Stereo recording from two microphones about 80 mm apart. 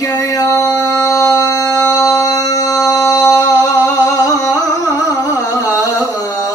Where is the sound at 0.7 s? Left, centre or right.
Left.